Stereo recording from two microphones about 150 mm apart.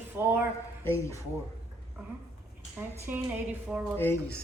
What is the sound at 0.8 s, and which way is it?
Speech, 20° left (ahead or behind).